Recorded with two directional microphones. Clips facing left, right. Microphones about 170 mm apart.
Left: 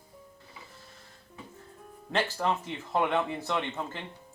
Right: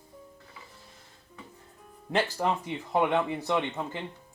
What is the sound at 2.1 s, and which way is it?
Speech, 15° right (ahead or behind).